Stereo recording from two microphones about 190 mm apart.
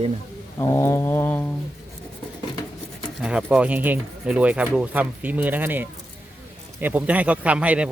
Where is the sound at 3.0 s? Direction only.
5° right (ahead or behind).